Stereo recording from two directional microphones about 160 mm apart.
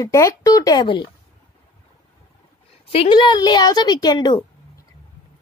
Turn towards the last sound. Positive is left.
turn(degrees=25)  # may be behind; listen again after turning